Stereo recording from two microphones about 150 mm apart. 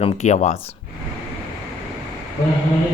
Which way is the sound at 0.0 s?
50° left (ahead or behind).